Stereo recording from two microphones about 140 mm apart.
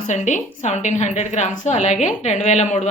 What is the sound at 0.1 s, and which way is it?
A woman's voice, 60° left (ahead or behind).